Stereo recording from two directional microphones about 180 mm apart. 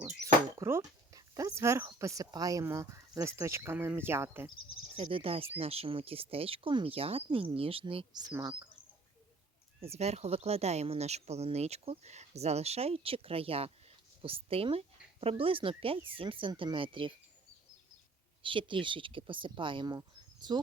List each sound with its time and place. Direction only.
0.6 s speech: 15° right (ahead or behind)
4.9 s speech: 30° right (ahead or behind)
9.8 s speech: 35° right (ahead or behind)
18.4 s speech: 30° right (ahead or behind)